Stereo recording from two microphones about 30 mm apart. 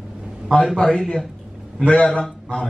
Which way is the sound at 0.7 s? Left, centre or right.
Left.